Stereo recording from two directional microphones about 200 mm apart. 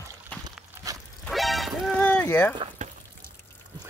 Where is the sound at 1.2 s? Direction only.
Centre (ahead or behind).